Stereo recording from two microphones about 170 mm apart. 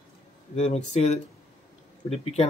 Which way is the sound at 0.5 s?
40° left (ahead or behind).